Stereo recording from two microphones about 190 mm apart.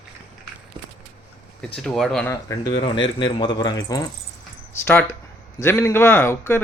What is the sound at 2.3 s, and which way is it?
Speech, 15° left (ahead or behind).